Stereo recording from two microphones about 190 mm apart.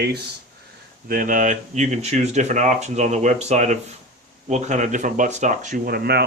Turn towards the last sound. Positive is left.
turn(degrees=-55)  # may be behind; listen again after turning